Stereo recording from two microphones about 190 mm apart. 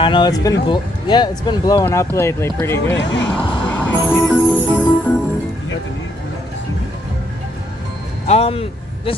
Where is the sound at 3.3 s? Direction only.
10° left (ahead or behind).